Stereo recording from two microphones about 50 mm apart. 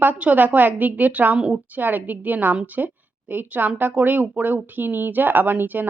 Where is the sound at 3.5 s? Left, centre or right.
Right.